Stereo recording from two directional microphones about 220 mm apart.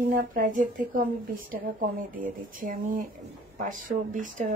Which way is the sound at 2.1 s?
40° right (ahead or behind).